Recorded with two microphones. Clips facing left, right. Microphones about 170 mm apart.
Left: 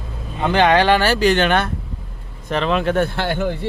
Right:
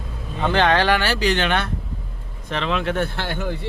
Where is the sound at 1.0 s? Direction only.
45° left (ahead or behind).